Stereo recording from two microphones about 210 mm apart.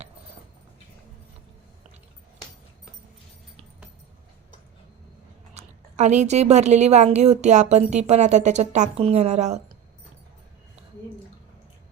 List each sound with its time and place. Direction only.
5.5 s a woman's voice: 35° right (ahead or behind)